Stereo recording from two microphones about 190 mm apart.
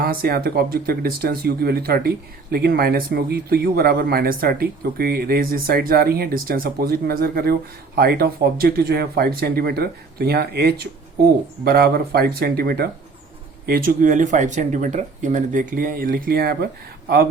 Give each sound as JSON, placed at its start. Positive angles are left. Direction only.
{"t": 0.0, "sound": "speech", "side_deg": -50}